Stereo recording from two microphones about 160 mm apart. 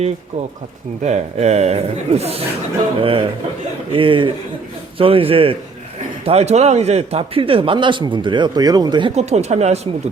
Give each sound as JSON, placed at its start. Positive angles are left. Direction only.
{"t": 1.0, "sound": "speech", "side_deg": -45}
{"t": 9.1, "sound": "speech", "side_deg": -45}